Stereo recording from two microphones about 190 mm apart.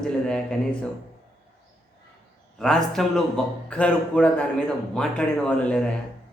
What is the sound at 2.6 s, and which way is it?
A man's voice, centre (ahead or behind).